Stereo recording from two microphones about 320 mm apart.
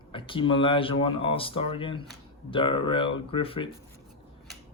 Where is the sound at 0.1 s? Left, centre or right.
Centre.